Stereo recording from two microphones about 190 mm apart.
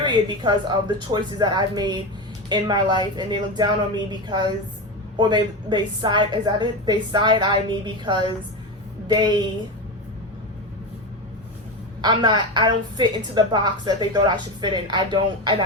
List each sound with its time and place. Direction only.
0.0 s a woman's voice: 25° right (ahead or behind)
12.0 s a woman's voice: 25° right (ahead or behind)